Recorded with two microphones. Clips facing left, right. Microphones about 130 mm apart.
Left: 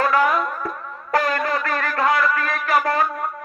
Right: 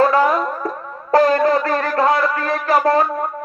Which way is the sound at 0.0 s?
30° right (ahead or behind).